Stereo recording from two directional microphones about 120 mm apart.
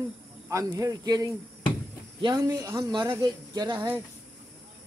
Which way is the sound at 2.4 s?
25° right (ahead or behind).